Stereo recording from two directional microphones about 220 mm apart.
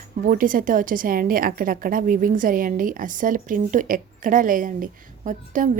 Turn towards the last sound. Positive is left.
turn(degrees=-35)  # may be behind; listen again after turning